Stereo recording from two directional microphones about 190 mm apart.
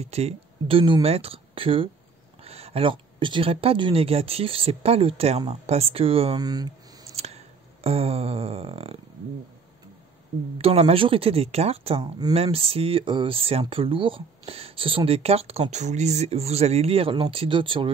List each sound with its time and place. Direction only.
0.0 s speech: 35° right (ahead or behind)
7.2 s a sound: 35° right (ahead or behind)
10.6 s speech: 30° right (ahead or behind)